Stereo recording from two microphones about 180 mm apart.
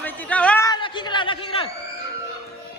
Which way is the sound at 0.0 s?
10° left (ahead or behind).